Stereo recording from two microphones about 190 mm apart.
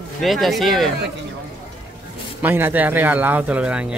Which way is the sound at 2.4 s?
10° right (ahead or behind).